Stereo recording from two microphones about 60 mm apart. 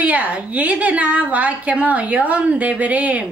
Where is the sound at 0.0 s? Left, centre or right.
Right.